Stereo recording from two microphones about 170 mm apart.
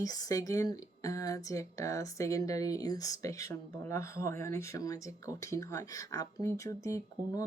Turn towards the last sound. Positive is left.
turn(degrees=20)  # may be behind; listen again after turning